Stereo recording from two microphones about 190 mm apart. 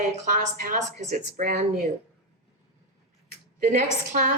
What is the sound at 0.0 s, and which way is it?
A woman's voice, 40° right (ahead or behind).